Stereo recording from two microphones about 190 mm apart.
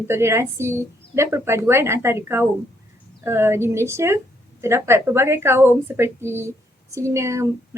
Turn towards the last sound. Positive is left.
turn(degrees=-15)  # may be behind; listen again after turning